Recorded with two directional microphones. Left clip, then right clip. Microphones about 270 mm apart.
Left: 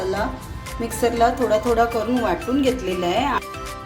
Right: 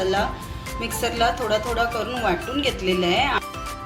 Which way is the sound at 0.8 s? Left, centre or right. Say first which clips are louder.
Left 4 dB; left.